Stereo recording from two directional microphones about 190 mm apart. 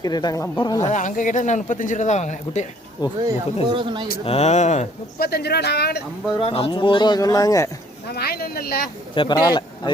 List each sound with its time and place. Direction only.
0.0 s speech: 20° left (ahead or behind)
0.8 s speech: 40° left (ahead or behind)
3.2 s speech: 25° right (ahead or behind)
4.3 s speech: 35° left (ahead or behind)
5.2 s speech: 60° left (ahead or behind)
6.4 s speech: 30° left (ahead or behind)
8.1 s speech: 55° left (ahead or behind)
9.1 s a man's voice: 25° left (ahead or behind)